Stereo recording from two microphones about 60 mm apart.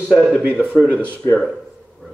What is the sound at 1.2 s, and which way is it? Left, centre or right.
Speech, left.